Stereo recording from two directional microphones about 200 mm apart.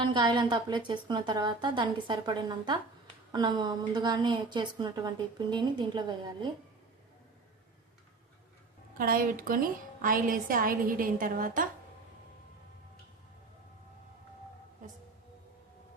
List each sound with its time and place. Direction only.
0.0 s a woman's voice: 25° right (ahead or behind)
9.0 s a woman's voice: 45° right (ahead or behind)